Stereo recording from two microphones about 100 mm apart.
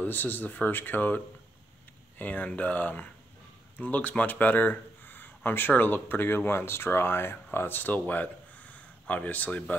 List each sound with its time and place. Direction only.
0.0 s speech: 20° left (ahead or behind)